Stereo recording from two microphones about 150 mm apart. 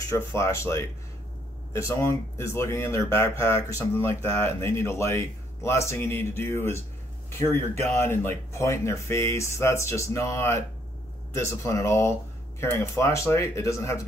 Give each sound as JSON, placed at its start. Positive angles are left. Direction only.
{"t": 0.1, "sound": "speech", "side_deg": 15}
{"t": 7.8, "sound": "speech", "side_deg": 15}